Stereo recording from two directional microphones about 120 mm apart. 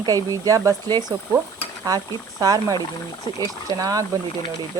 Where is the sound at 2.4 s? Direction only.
30° right (ahead or behind).